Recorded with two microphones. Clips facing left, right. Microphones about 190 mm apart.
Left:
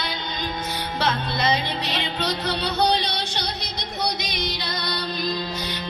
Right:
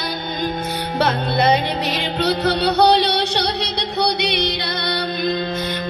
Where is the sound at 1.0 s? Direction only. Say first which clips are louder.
Right 7 dB; 65° right (ahead or behind).